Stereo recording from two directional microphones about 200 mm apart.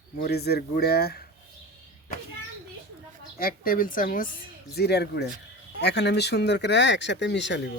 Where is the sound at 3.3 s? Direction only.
45° left (ahead or behind).